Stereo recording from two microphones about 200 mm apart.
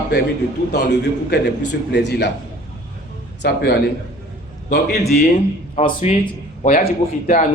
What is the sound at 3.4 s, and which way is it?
Speech, 55° left (ahead or behind).